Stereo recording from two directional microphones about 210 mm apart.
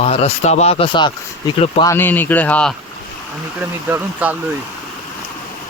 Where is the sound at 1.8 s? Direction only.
10° left (ahead or behind).